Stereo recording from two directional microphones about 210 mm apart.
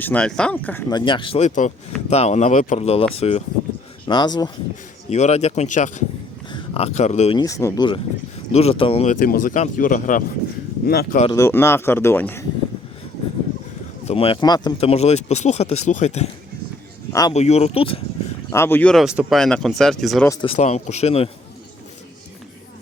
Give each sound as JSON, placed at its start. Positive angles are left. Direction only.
{"t": 0.0, "sound": "speech", "side_deg": 5}
{"t": 0.9, "sound": "speech", "side_deg": 20}
{"t": 5.0, "sound": "speech", "side_deg": 30}
{"t": 7.3, "sound": "speech", "side_deg": 15}
{"t": 11.3, "sound": "speech", "side_deg": 15}
{"t": 14.0, "sound": "speech", "side_deg": 25}
{"t": 17.1, "sound": "speech", "side_deg": 15}
{"t": 17.3, "sound": "speech", "side_deg": 30}
{"t": 18.5, "sound": "speech", "side_deg": 10}
{"t": 20.2, "sound": "speech", "side_deg": 15}
{"t": 20.5, "sound": "speech", "side_deg": 30}